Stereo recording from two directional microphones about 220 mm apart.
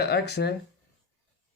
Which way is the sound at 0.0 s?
50° left (ahead or behind).